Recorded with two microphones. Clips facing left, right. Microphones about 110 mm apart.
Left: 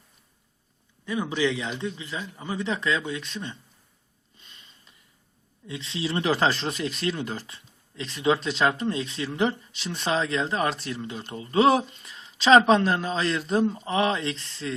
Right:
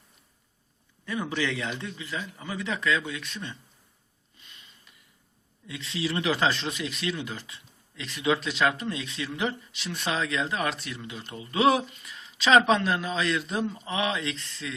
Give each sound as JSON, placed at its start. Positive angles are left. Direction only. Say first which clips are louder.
{"t": 1.0, "sound": "speech", "louder": "left 4 dB", "side_deg": 20}
{"t": 5.6, "sound": "speech", "louder": "left 1 dB", "side_deg": 30}